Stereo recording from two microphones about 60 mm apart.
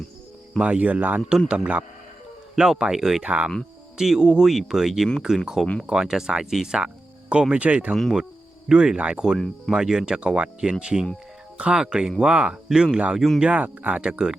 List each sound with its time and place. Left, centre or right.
0.6 s speech: right; by 3.2 s centre
3.2 s speech: right
3.9 s speech: centre; by 7.9 s right
8.7 s speech: centre
11.5 s music: centre
11.8 s speech: centre
13.1 s speech: centre
13.4 s speech: right